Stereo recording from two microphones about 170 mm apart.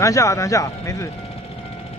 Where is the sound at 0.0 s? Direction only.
20° left (ahead or behind).